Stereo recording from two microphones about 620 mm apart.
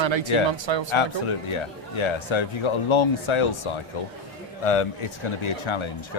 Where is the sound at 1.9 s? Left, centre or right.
Left.